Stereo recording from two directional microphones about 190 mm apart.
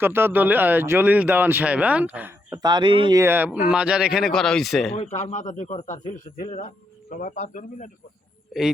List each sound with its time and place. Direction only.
0.0 s speech: 10° right (ahead or behind)
2.6 s speech: 20° right (ahead or behind); by 4.9 s centre (ahead or behind)
4.9 s a man's voice: 40° left (ahead or behind)
8.5 s a man's voice: centre (ahead or behind)